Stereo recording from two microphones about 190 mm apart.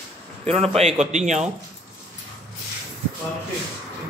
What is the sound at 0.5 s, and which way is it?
A man's voice, 35° right (ahead or behind).